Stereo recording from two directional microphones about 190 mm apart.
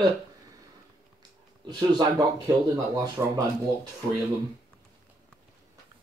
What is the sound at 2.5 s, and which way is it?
Speech, 15° right (ahead or behind).